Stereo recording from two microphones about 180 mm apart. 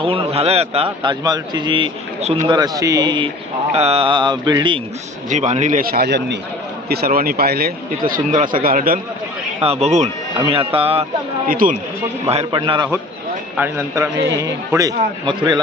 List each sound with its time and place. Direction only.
0.0 s a man's voice: 30° right (ahead or behind)
3.7 s a man's voice: 35° right (ahead or behind)
5.3 s speech: 40° right (ahead or behind); by 6.4 s 70° right (ahead or behind)
6.9 s a man's voice: 55° right (ahead or behind)
9.6 s speech: 35° right (ahead or behind)
11.4 s a man's voice: 50° right (ahead or behind)
12.3 s a man's voice: 30° right (ahead or behind)
13.6 s a man's voice: 15° right (ahead or behind)